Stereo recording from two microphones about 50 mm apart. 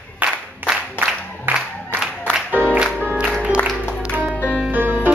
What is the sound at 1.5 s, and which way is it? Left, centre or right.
Music, right.